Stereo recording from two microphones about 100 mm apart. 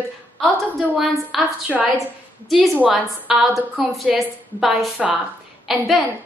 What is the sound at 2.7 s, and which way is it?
A woman's voice, 15° right (ahead or behind).